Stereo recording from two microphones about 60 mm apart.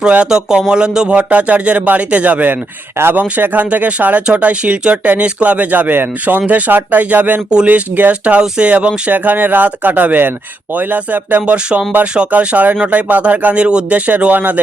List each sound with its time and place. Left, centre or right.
0.3 s speech: centre; by 11.5 s right
12.1 s speech: centre